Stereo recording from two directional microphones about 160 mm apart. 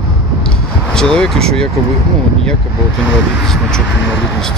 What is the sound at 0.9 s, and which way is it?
Speech, 5° left (ahead or behind).